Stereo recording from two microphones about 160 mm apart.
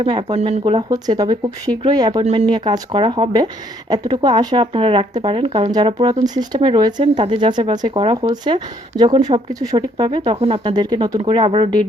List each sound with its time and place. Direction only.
0.0 s speech: 30° right (ahead or behind)
0.9 s speech: 25° right (ahead or behind)
2.2 s speech: 45° right (ahead or behind)
2.5 s speech: 25° right (ahead or behind)